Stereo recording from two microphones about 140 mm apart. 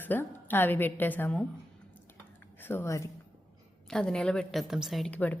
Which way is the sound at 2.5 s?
15° left (ahead or behind).